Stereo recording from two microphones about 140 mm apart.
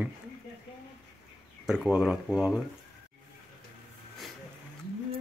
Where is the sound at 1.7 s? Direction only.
5° right (ahead or behind).